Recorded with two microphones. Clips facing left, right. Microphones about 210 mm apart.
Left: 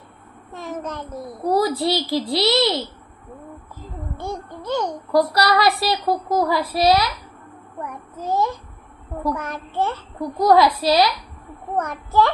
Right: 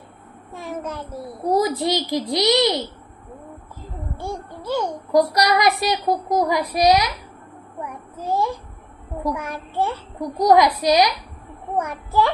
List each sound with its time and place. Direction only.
0.5 s a child's voice: 10° right (ahead or behind)
4.6 s a child's voice: 10° right (ahead or behind)
7.8 s child singing: 10° right (ahead or behind)
9.2 s a child's voice: 15° right (ahead or behind)